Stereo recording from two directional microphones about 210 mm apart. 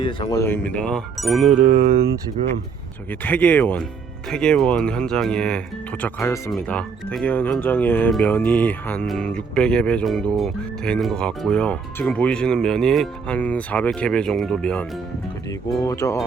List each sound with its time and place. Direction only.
0.0 s speech: 25° left (ahead or behind)
0.3 s speech: 10° left (ahead or behind)
1.5 s mantra: 50° right (ahead or behind)
3.1 s speech: 10° left (ahead or behind)
15.8 s speech: 15° left (ahead or behind)